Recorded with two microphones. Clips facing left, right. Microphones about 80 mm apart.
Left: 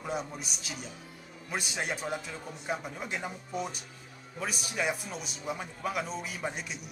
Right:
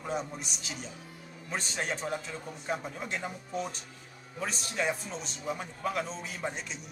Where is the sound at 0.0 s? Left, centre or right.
Centre.